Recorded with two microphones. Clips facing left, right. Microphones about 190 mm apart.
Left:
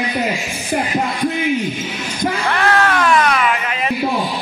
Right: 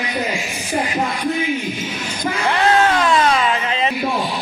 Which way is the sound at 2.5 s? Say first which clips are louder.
Right 3 dB; 20° right (ahead or behind).